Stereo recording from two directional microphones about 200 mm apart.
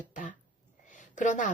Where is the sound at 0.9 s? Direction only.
40° left (ahead or behind).